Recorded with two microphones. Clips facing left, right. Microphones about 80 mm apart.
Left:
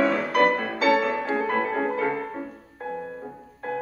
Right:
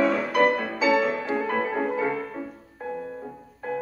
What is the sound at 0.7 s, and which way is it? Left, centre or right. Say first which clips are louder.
Music: left 1 dB; left.